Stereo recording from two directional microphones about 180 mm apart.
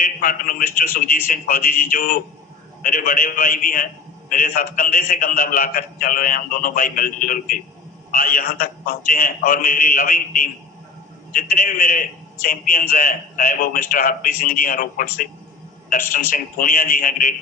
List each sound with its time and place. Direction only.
0.0 s a man's voice: 50° left (ahead or behind)